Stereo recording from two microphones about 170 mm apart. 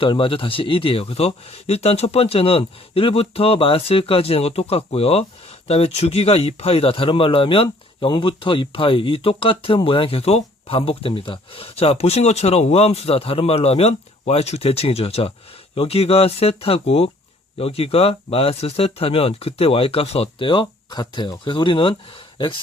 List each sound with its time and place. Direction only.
0.0 s speech: 30° left (ahead or behind)